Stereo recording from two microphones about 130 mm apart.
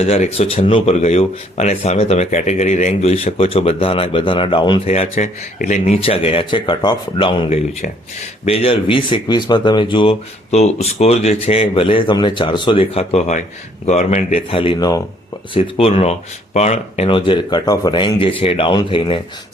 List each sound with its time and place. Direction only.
0.0 s speech: 55° left (ahead or behind)
1.0 s speech: 55° left (ahead or behind); by 4.8 s 40° left (ahead or behind)
5.1 s speech: 80° left
14.5 s speech: 45° left (ahead or behind)
17.1 s a man's voice: 40° left (ahead or behind)